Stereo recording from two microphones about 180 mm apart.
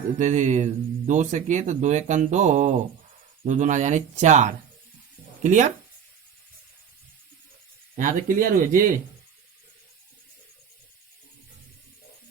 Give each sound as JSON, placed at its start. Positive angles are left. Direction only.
{"t": 0.2, "sound": "speech", "side_deg": -40}
{"t": 7.9, "sound": "speech", "side_deg": -45}